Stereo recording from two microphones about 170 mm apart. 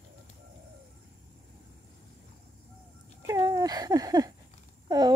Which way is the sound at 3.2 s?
20° right (ahead or behind).